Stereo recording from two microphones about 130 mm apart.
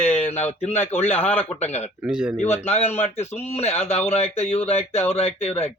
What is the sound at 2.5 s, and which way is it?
Speech, 55° left (ahead or behind).